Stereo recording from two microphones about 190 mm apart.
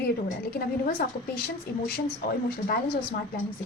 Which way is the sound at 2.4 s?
50° left (ahead or behind).